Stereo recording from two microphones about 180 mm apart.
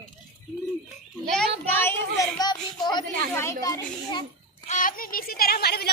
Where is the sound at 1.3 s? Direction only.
10° left (ahead or behind).